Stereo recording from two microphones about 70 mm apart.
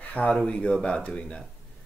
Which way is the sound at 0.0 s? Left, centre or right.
Centre.